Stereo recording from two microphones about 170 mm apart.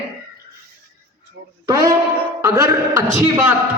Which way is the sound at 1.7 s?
20° right (ahead or behind).